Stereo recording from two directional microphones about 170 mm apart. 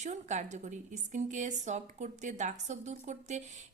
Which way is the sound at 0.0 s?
45° right (ahead or behind).